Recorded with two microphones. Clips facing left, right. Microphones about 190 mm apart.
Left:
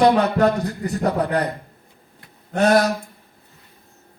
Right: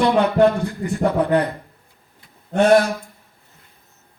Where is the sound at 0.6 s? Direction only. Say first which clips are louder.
Right 2 dB; 40° left (ahead or behind).